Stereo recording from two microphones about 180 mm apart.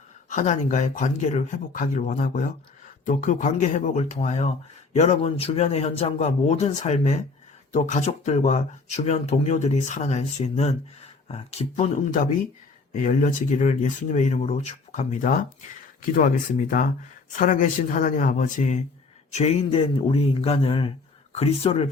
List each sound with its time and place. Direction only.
0.3 s speech: 45° left (ahead or behind)